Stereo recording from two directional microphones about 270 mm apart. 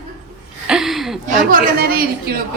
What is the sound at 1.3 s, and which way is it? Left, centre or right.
A woman's voice, right.